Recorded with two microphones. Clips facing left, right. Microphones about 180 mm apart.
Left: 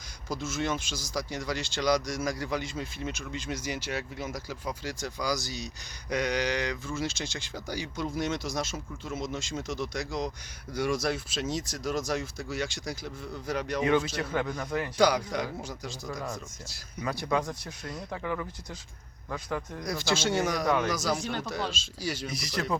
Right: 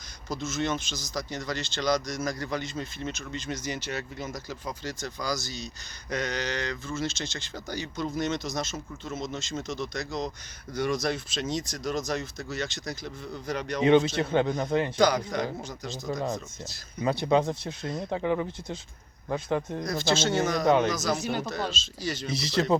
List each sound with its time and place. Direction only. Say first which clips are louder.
0.3 s speech: right 1 dB; 10° left (ahead or behind)
13.8 s speech: right 7 dB; 25° right (ahead or behind)
14.9 s speech: left 2 dB; 10° left (ahead or behind)
17.0 s speech: right 6 dB; 25° right (ahead or behind)
19.8 s speech: right 3 dB; 10° left (ahead or behind)
21.2 s speech: right 3 dB; 10° right (ahead or behind)
21.7 s speech: right 1 dB; 10° left (ahead or behind)
22.3 s speech: right 6 dB; 25° right (ahead or behind)